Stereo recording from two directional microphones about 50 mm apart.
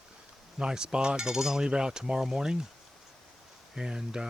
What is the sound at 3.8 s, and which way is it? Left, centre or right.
Cutlery, centre.